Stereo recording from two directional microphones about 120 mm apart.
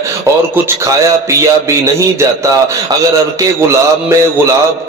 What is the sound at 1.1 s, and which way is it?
Speech, 25° right (ahead or behind).